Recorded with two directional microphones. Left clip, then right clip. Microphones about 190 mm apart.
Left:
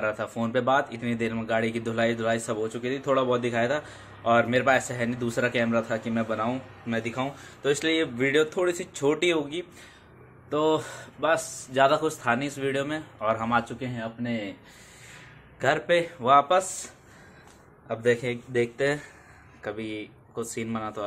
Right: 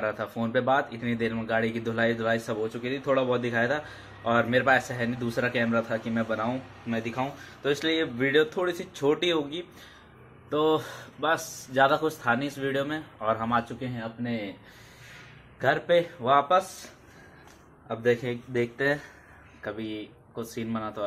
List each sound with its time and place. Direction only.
0.0 s speech: 15° left (ahead or behind)
3.3 s speech: 5° left (ahead or behind)
10.5 s speech: centre (ahead or behind); by 14.1 s 15° left (ahead or behind)
15.6 s speech: 5° left (ahead or behind)
16.2 s a man's voice: 15° left (ahead or behind)
18.6 s speech: centre (ahead or behind)